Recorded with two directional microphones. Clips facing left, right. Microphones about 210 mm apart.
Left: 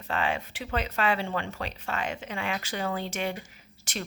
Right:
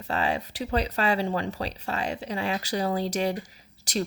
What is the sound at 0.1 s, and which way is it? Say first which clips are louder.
Speech: right 2 dB; 40° right (ahead or behind).